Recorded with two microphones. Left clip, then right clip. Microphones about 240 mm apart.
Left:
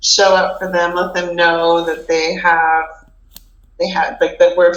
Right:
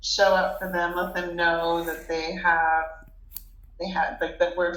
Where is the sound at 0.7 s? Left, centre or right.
Left.